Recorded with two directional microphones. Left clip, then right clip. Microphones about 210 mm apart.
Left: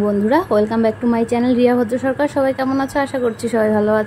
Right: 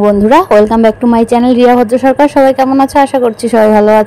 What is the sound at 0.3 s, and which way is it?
A woman's voice, 30° right (ahead or behind).